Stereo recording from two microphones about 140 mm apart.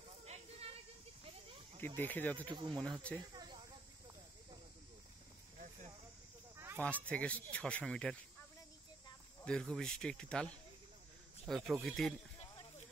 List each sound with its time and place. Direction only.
0.2 s a sound: 45° right (ahead or behind)
2.0 s speech: 10° left (ahead or behind)
2.4 s speech: 35° right (ahead or behind)
2.7 s speech: 5° left (ahead or behind)
6.5 s a sound: 15° right (ahead or behind)
7.1 s speech: 10° left (ahead or behind)
9.4 s speech: 5° left (ahead or behind)